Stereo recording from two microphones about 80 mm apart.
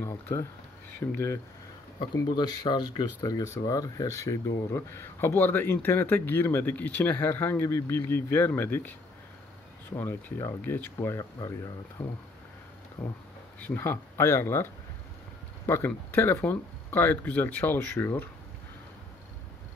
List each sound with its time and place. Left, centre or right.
0.0 s speech: left
2.3 s speech: left
11.3 s speech: left
12.0 s speech: centre